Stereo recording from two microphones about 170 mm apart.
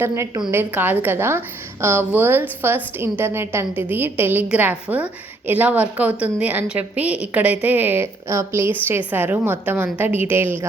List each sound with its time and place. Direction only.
0.0 s a woman's voice: 15° right (ahead or behind)